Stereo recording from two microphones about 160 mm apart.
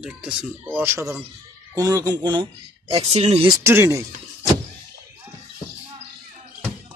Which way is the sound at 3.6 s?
15° right (ahead or behind).